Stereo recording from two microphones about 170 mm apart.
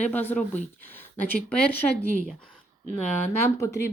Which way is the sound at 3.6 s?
15° left (ahead or behind).